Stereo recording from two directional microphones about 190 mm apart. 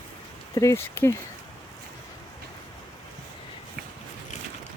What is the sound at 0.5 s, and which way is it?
Speech, 15° left (ahead or behind).